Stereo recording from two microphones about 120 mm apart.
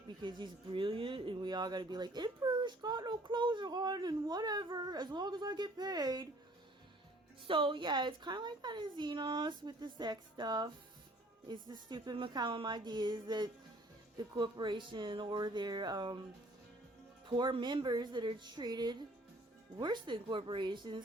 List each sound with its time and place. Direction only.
0.2 s speech: 40° right (ahead or behind)
7.4 s speech: 45° right (ahead or behind)
17.2 s speech: 40° right (ahead or behind)